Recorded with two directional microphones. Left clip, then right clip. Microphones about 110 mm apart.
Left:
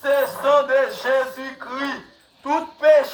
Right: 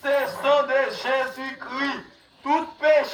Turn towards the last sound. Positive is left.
turn(degrees=55)  # may be behind; listen again after turning